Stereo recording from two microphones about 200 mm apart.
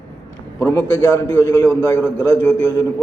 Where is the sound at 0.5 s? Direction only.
10° left (ahead or behind).